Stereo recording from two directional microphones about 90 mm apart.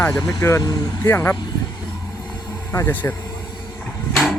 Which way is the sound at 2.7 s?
25° left (ahead or behind).